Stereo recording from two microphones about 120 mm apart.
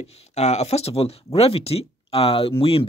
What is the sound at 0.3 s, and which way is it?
Speech, 65° left (ahead or behind).